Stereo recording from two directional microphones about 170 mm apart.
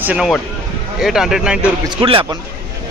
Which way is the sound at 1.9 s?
30° right (ahead or behind).